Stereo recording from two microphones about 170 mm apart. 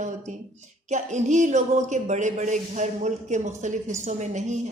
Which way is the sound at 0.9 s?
45° right (ahead or behind).